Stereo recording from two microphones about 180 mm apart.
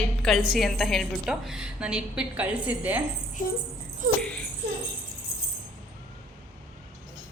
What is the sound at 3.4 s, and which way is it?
Speech, 50° left (ahead or behind).